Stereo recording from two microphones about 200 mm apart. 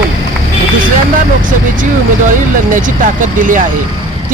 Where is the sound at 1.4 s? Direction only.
40° right (ahead or behind).